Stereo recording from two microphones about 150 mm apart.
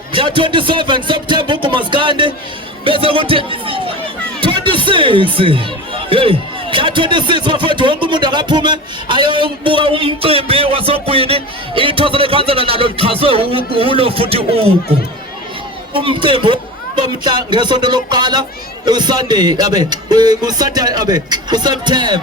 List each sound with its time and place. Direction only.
0.1 s a man's voice: 35° right (ahead or behind)
15.9 s a man's voice: 35° right (ahead or behind)